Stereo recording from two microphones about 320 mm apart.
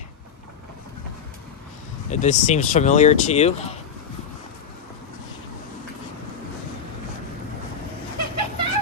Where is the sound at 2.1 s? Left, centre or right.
Left.